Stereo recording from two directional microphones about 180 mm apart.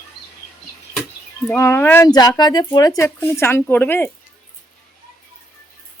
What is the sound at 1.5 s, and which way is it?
Speech, 15° left (ahead or behind).